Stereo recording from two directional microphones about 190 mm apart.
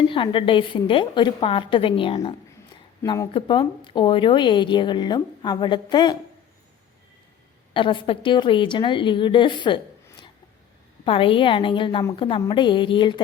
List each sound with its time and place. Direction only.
0.0 s speech: 25° left (ahead or behind)
3.0 s speech: 15° left (ahead or behind)
7.7 s speech: 25° left (ahead or behind)
11.0 s speech: 30° left (ahead or behind)